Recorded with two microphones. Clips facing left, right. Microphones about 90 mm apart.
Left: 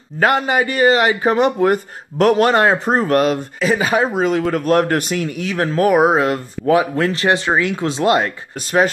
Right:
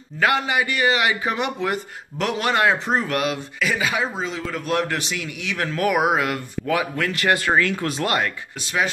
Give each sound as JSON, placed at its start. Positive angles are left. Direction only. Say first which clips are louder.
{"t": 0.2, "sound": "speech", "louder": "left 5 dB", "side_deg": 40}
{"t": 4.1, "sound": "speech", "louder": "left 11 dB", "side_deg": 60}